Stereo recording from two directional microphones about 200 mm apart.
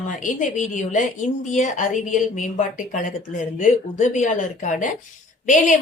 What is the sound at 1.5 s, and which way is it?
Speech, 40° left (ahead or behind).